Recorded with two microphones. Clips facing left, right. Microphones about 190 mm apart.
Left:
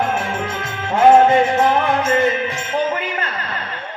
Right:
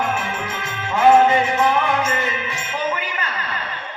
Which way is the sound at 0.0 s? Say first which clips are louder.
Left 3 dB; 40° left (ahead or behind).